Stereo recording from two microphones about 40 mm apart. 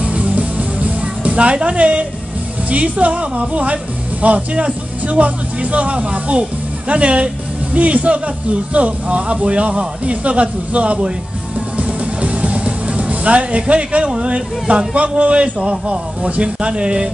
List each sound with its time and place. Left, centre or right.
0.0 s music: right
2.7 s speech: right